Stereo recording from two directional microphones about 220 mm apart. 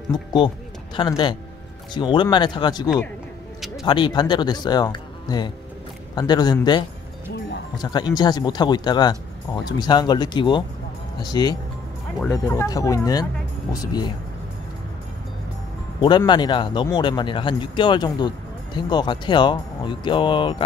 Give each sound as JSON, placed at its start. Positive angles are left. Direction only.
{"t": 0.1, "sound": "a man's voice", "side_deg": 20}
{"t": 16.0, "sound": "a man's voice", "side_deg": 20}